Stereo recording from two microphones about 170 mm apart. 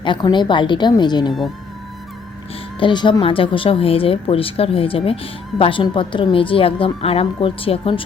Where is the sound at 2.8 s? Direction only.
30° left (ahead or behind).